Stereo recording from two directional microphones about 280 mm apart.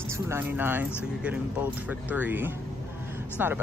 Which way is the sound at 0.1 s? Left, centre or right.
Centre.